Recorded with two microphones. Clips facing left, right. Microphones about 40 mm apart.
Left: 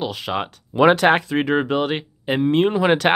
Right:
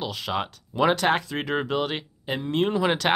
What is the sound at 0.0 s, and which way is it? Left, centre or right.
Speech, centre.